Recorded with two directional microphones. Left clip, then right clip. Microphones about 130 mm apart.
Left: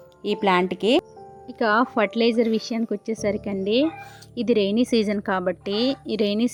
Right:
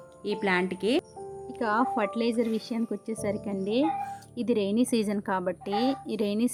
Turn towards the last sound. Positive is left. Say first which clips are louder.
# left 6 dB
turn(degrees=30)  # may be behind; listen again after turning